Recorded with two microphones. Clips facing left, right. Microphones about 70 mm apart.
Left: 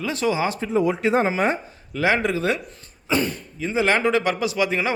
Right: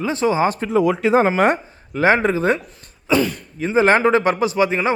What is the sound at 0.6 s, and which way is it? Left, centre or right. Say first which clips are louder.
Speech: right 4 dB; right.